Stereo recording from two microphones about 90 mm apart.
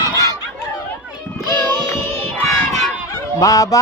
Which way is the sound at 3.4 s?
40° left (ahead or behind).